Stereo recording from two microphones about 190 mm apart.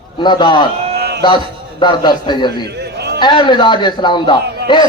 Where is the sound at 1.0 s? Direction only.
55° right (ahead or behind).